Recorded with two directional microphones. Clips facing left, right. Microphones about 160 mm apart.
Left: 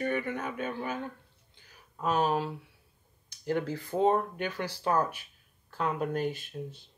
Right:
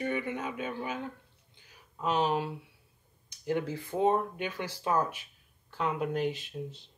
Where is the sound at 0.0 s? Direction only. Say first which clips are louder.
Left 1 dB; 15° right (ahead or behind).